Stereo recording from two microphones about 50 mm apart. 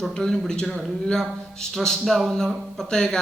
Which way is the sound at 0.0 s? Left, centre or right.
Centre.